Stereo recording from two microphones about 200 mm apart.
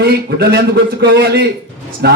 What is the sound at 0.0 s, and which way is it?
A man's voice, 55° right (ahead or behind).